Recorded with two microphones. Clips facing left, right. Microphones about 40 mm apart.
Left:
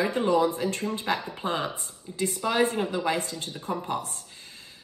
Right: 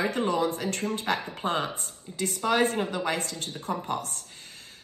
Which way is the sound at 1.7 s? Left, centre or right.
Right.